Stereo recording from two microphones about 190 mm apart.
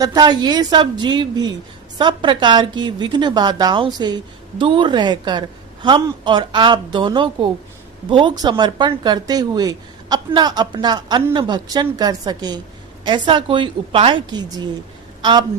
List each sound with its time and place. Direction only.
0.0 s a woman's voice: 20° right (ahead or behind)